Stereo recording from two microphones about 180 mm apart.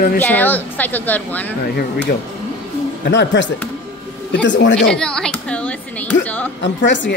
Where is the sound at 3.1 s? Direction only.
80° left.